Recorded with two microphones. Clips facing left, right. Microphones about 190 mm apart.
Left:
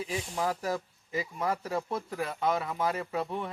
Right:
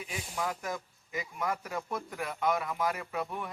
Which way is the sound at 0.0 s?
30° left (ahead or behind).